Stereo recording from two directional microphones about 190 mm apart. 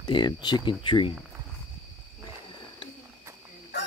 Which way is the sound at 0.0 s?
25° left (ahead or behind).